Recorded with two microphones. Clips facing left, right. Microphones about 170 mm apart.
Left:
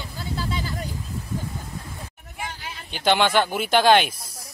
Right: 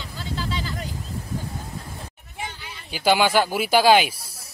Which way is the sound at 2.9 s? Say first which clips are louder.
Right 1 dB; 5° right (ahead or behind).